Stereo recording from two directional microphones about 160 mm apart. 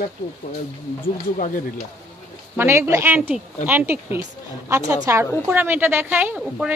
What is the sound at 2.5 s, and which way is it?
A woman's voice, 15° right (ahead or behind).